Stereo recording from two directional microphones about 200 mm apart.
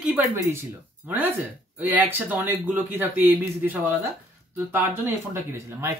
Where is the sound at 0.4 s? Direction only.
10° right (ahead or behind).